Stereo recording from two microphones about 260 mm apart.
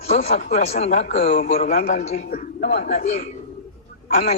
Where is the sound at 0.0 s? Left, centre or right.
Left.